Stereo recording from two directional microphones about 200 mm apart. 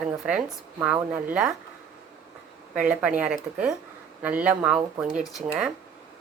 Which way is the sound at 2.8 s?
5° right (ahead or behind).